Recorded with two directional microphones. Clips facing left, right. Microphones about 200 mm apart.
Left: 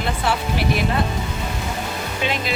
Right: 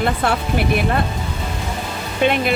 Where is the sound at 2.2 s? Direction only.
55° right (ahead or behind).